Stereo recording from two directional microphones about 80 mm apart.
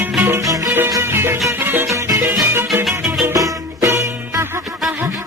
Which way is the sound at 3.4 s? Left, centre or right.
Right.